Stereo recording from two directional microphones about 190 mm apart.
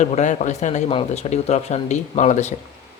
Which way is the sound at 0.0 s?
40° left (ahead or behind).